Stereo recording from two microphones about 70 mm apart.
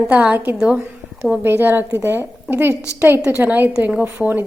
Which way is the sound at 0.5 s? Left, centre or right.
Centre.